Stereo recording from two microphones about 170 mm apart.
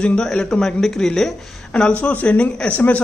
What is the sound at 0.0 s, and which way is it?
A man's voice, 5° left (ahead or behind).